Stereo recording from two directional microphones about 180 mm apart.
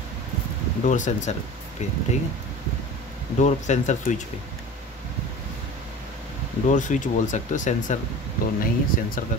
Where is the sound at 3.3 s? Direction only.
40° left (ahead or behind).